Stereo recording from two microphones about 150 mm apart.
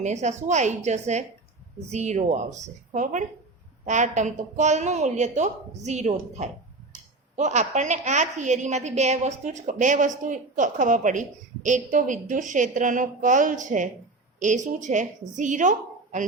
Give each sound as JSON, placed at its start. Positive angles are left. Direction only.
{"t": 0.0, "sound": "a woman's voice", "side_deg": -50}